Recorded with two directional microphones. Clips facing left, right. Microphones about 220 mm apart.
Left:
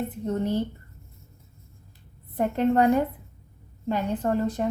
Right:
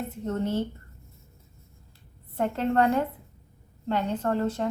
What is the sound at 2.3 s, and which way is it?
A woman's voice, 15° left (ahead or behind).